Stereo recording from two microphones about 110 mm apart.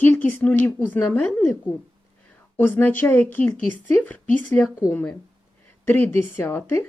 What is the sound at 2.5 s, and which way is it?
A woman's voice, 20° left (ahead or behind).